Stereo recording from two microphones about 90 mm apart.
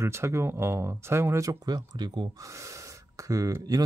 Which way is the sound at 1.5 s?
50° right (ahead or behind).